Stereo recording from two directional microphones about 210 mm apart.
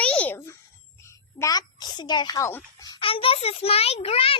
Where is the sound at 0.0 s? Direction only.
5° left (ahead or behind).